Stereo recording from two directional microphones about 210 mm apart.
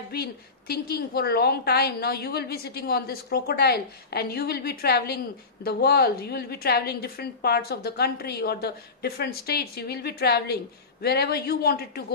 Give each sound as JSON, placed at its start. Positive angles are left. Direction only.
{"t": 0.1, "sound": "a woman's voice", "side_deg": 50}